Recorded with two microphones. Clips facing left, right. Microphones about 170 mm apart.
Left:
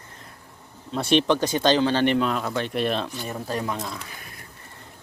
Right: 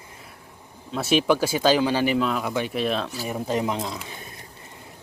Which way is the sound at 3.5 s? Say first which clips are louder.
Right 4 dB; 20° right (ahead or behind).